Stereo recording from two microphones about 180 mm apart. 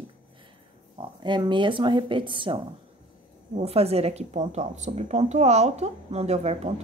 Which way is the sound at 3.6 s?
35° right (ahead or behind).